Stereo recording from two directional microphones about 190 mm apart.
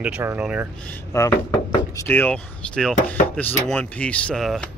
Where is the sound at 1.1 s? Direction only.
15° left (ahead or behind).